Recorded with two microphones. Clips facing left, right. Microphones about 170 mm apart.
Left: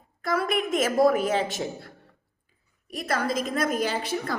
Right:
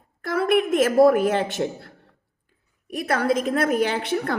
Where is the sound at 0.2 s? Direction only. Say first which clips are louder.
Right 5 dB; 60° right (ahead or behind).